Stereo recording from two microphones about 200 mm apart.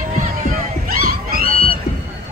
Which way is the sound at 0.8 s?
45° right (ahead or behind).